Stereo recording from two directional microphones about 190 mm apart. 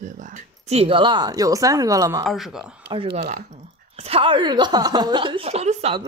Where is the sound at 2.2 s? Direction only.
Centre (ahead or behind).